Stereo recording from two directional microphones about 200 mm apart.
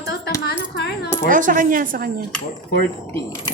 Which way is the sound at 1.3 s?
40° right (ahead or behind).